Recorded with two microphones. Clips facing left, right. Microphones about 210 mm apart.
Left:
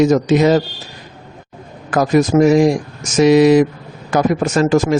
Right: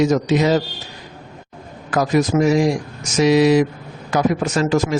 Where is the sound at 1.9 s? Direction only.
45° left (ahead or behind).